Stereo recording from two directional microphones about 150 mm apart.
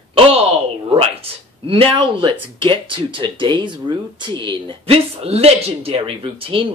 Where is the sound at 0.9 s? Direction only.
40° right (ahead or behind).